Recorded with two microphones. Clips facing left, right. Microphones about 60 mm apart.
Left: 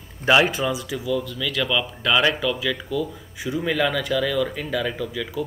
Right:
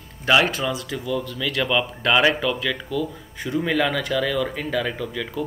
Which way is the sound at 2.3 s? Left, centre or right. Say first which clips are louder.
Right 1 dB; centre.